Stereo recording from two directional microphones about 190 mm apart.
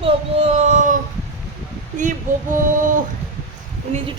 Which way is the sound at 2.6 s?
45° right (ahead or behind).